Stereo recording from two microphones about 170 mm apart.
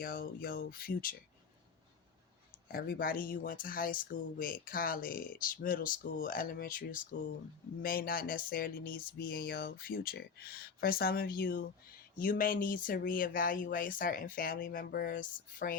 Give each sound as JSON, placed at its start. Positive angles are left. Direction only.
{"t": 0.0, "sound": "speech", "side_deg": 55}
{"t": 2.6, "sound": "speech", "side_deg": 60}